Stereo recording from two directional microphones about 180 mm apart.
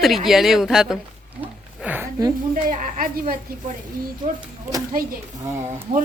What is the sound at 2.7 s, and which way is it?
Speech, 45° right (ahead or behind).